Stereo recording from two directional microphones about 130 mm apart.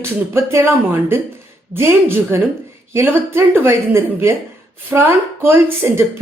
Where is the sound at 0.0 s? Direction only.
20° right (ahead or behind).